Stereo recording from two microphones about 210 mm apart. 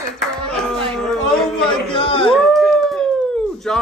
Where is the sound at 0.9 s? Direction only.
5° left (ahead or behind).